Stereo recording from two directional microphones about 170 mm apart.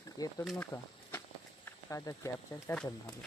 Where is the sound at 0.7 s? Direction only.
25° left (ahead or behind).